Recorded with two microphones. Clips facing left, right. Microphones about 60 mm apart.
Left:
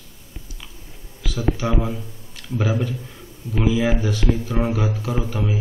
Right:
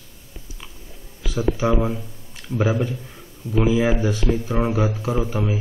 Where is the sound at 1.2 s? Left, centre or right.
Right.